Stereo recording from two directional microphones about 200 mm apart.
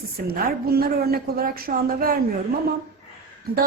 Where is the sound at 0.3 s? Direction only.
50° right (ahead or behind).